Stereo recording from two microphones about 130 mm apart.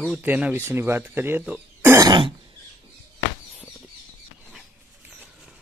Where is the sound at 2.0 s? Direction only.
40° right (ahead or behind).